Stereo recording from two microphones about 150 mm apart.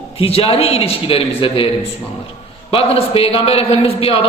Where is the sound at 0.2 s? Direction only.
40° left (ahead or behind).